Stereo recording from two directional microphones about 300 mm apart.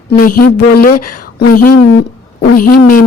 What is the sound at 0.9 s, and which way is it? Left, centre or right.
Speech, left.